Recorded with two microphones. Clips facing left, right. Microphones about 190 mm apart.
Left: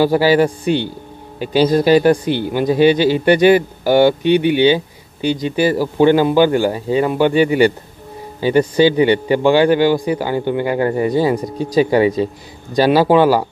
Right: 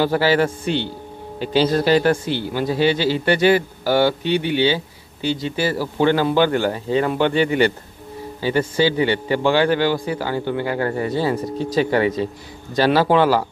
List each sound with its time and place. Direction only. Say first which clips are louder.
0.0 s speech: left 5 dB; 15° left (ahead or behind)